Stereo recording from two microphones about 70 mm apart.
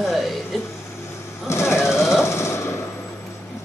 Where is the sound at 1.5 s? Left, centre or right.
Left.